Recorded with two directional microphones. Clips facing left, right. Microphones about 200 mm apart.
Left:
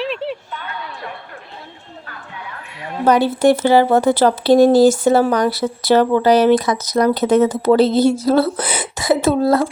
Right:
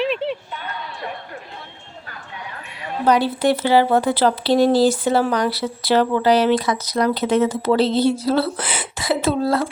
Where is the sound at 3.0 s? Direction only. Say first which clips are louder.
Left 4 dB; 45° left (ahead or behind).